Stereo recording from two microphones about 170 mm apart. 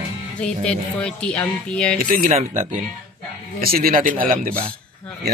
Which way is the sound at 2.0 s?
55° right (ahead or behind).